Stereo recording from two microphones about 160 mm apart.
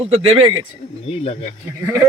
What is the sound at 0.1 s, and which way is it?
Speech, 35° right (ahead or behind).